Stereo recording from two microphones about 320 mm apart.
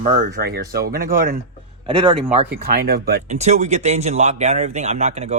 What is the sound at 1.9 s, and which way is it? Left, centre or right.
Speech, centre.